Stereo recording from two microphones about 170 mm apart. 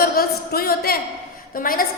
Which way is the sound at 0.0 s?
60° left (ahead or behind).